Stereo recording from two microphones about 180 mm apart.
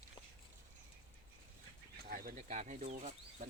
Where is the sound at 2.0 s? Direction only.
50° right (ahead or behind).